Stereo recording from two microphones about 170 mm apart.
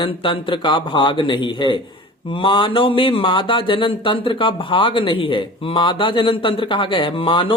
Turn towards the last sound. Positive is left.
turn(degrees=30)  # may be behind; listen again after turning